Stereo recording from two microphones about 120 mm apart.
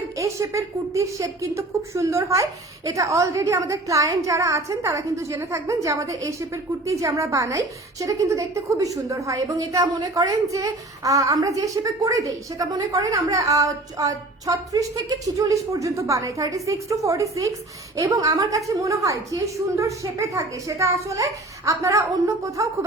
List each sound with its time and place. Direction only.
0.2 s a woman's voice: 25° right (ahead or behind)